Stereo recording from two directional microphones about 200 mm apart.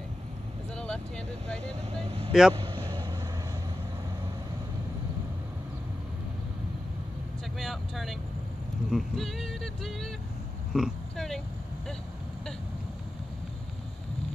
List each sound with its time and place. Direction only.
0.7 s speech: 5° left (ahead or behind)
2.0 s speech: 30° right (ahead or behind)
2.5 s vehicle: 25° right (ahead or behind)
7.5 s vehicle: centre (ahead or behind)
8.9 s speech: centre (ahead or behind)
10.7 s oink: centre (ahead or behind)